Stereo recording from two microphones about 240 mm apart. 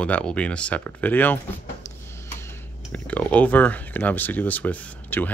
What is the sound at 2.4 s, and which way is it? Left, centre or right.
Speech, centre.